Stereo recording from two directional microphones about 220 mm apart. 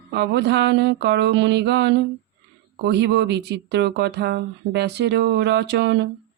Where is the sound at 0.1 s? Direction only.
50° right (ahead or behind).